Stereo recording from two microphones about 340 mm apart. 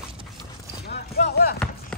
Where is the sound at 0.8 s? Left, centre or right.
Left.